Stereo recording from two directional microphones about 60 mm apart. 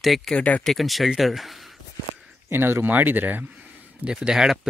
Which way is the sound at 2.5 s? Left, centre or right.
Right.